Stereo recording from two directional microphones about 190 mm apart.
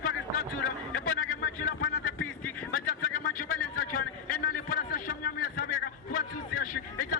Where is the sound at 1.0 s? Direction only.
45° left (ahead or behind).